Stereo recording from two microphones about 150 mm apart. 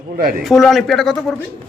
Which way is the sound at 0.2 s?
75° right (ahead or behind).